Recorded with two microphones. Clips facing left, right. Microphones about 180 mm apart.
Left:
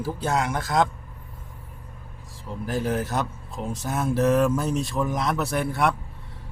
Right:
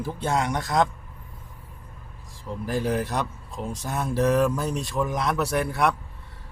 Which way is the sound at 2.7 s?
Centre (ahead or behind).